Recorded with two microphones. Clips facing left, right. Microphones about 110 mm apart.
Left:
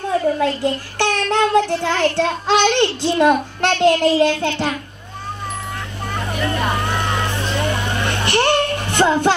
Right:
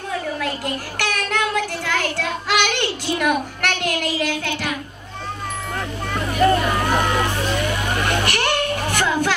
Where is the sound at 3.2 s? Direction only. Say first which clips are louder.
Left 7 dB; 25° left (ahead or behind).